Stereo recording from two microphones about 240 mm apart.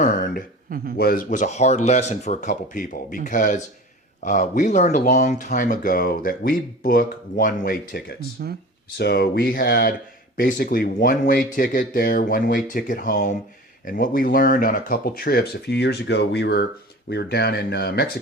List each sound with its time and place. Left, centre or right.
0.0 s a sound: left
0.9 s speech: left
8.4 s speech: right
9.0 s speech: left